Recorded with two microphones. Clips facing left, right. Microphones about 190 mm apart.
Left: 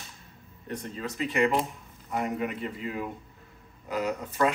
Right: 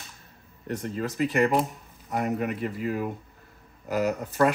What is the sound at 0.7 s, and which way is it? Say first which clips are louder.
Speech: right 5 dB; 50° right (ahead or behind).